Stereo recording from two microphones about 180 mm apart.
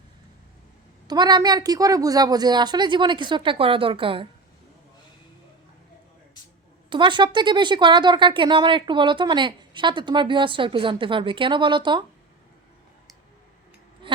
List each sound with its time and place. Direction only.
1.0 s speech: 25° right (ahead or behind)
6.9 s speech: 25° right (ahead or behind)
14.0 s a sound: 30° right (ahead or behind)